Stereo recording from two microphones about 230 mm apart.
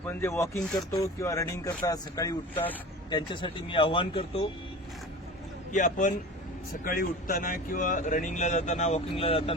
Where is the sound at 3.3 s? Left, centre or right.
Left.